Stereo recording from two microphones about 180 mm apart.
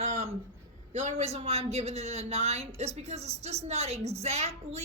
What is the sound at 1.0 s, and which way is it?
Speech, 35° right (ahead or behind).